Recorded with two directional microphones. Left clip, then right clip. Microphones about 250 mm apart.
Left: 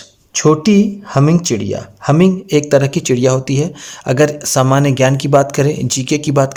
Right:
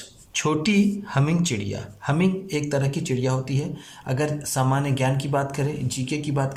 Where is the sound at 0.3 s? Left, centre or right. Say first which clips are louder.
Left 11 dB; left.